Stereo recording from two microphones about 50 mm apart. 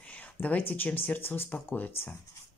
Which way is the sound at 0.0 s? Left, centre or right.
Left.